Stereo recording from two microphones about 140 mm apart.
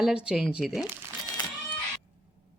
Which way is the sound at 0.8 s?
30° left (ahead or behind).